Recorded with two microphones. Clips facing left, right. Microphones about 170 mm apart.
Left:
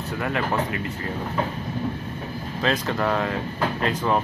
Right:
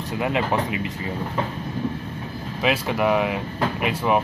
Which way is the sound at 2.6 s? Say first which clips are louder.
Right 2 dB; 10° right (ahead or behind).